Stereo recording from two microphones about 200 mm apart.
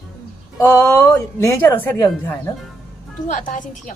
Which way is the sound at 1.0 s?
10° left (ahead or behind).